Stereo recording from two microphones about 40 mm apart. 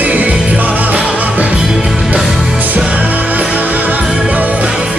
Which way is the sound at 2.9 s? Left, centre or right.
Right.